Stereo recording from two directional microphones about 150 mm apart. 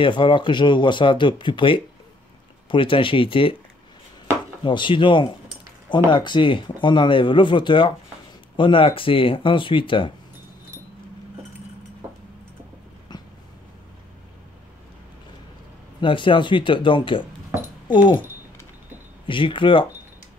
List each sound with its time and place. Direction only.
0.0 s speech: 35° left (ahead or behind)
4.6 s speech: 30° left (ahead or behind)
13.1 s a sound: 30° left (ahead or behind)
16.0 s speech: 35° left (ahead or behind)
19.2 s speech: 35° left (ahead or behind)